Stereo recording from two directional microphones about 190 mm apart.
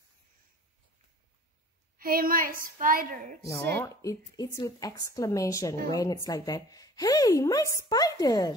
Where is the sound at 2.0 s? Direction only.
50° right (ahead or behind).